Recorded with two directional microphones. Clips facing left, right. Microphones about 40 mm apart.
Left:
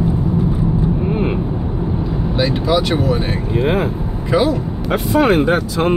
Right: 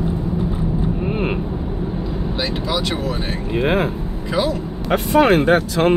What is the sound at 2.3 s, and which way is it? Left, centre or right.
Speech, centre.